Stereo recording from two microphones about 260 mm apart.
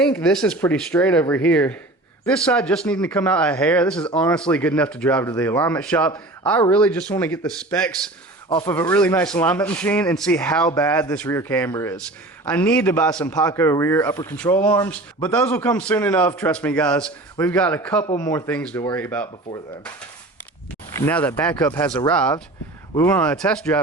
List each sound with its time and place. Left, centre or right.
0.0 s a man's voice: centre
8.4 s a man's voice: centre
8.7 s a man's voice: centre
18.0 s speech: centre
20.9 s a man's voice: centre